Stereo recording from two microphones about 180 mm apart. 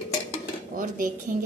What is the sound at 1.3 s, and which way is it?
Speech, 50° right (ahead or behind).